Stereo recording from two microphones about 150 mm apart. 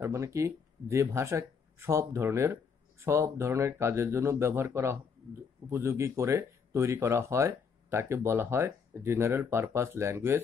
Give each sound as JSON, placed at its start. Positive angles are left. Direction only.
{"t": 0.0, "sound": "speech", "side_deg": -20}